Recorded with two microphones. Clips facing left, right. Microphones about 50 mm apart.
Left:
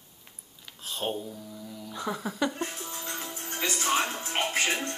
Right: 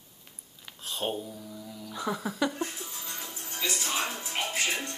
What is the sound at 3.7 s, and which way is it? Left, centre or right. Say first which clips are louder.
Speech: left 5 dB; left.